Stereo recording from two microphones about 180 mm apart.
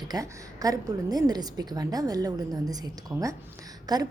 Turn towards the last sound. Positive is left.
turn(degrees=-20)  # may be behind; listen again after turning